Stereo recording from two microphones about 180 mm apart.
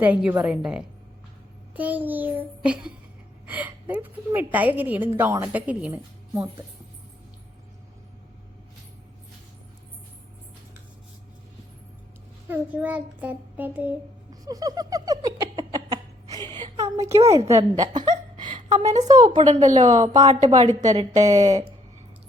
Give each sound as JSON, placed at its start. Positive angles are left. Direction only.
{"t": 0.0, "sound": "a woman's voice", "side_deg": -10}
{"t": 12.5, "sound": "a woman's voice", "side_deg": -10}
{"t": 14.4, "sound": "a sound", "side_deg": -20}
{"t": 17.0, "sound": "a woman's voice", "side_deg": -15}
{"t": 17.7, "sound": "a sound", "side_deg": -25}
{"t": 19.0, "sound": "a woman's voice", "side_deg": -20}
{"t": 19.6, "sound": "speech", "side_deg": -40}
{"t": 20.5, "sound": "a woman's voice", "side_deg": -20}
{"t": 20.9, "sound": "speech", "side_deg": -35}
{"t": 21.2, "sound": "a woman's voice", "side_deg": -20}